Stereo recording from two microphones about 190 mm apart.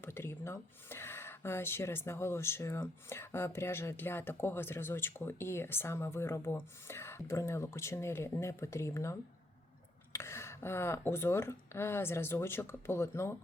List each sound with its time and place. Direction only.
0.0 s speech: 10° left (ahead or behind)